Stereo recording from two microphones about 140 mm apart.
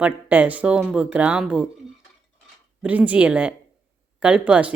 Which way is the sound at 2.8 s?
10° right (ahead or behind).